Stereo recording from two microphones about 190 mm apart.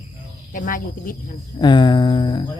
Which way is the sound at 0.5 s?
45° left (ahead or behind).